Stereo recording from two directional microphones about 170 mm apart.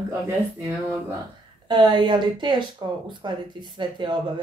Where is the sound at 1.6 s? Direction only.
25° right (ahead or behind).